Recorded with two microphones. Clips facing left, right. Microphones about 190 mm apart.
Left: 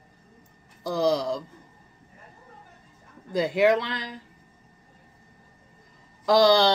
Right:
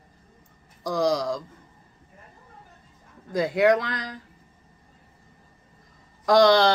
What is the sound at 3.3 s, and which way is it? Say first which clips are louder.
Speech: right 1 dB; 25° left (ahead or behind).